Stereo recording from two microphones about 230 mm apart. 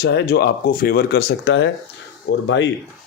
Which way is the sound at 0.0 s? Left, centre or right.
Left.